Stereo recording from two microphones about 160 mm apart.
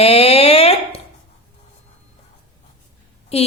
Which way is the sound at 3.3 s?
40° left (ahead or behind).